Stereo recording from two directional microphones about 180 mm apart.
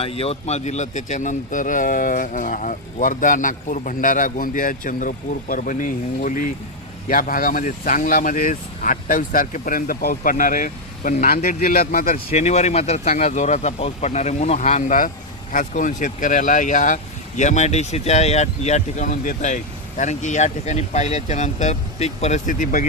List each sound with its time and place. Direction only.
0.0 s speech: 30° left (ahead or behind); by 12.2 s 50° left (ahead or behind)
12.3 s speech: 35° left (ahead or behind)